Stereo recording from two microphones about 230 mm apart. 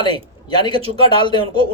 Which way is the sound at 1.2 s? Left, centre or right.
Centre.